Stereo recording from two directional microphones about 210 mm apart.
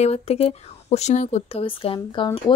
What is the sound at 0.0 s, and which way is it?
Speech, 30° left (ahead or behind).